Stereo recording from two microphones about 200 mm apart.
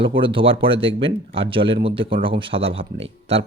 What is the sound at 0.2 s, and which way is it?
Speech, 25° right (ahead or behind).